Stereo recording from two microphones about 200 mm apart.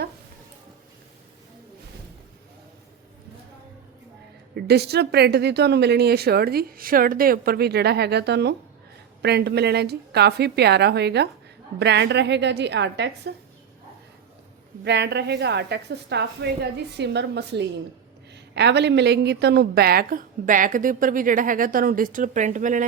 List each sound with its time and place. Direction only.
4.5 s a woman's voice: 55° right (ahead or behind)
14.8 s a woman's voice: 60° right (ahead or behind); by 22.8 s 40° right (ahead or behind)